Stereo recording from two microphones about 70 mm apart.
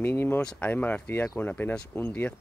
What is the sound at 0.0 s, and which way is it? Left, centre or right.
Speech, left.